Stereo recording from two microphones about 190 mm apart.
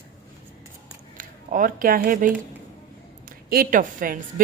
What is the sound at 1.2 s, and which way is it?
Speech, 45° right (ahead or behind).